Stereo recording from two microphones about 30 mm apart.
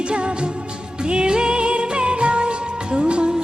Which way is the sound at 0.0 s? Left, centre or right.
Right.